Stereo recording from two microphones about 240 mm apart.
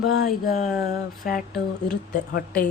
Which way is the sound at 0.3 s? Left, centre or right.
Left.